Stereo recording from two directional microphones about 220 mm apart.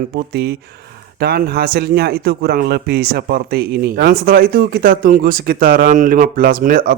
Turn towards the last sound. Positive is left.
turn(degrees=-40)  # may be behind; listen again after turning